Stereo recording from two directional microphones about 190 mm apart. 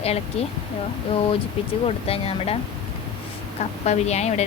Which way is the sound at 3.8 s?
35° left (ahead or behind).